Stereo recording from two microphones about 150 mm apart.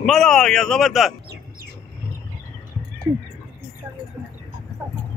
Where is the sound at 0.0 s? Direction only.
5° left (ahead or behind).